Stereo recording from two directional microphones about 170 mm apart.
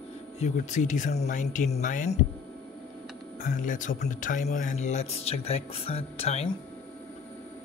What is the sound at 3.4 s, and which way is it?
Speech, 50° left (ahead or behind).